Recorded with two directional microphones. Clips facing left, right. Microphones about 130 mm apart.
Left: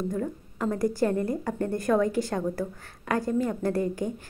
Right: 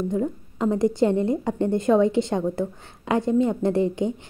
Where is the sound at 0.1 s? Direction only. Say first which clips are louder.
Right 5 dB; 20° right (ahead or behind).